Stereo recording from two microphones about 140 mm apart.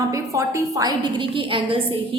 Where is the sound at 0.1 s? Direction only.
20° right (ahead or behind).